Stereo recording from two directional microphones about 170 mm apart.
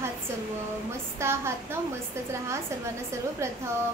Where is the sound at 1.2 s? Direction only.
15° right (ahead or behind).